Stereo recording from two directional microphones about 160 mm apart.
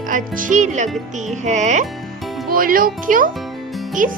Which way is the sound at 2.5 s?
60° right (ahead or behind).